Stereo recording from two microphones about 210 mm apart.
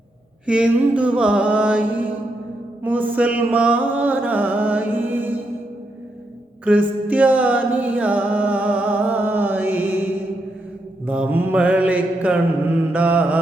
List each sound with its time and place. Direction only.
0.4 s a sound: 5° right (ahead or behind)
2.8 s music: 10° right (ahead or behind)
6.7 s music: 5° right (ahead or behind)
11.0 s music: 5° right (ahead or behind)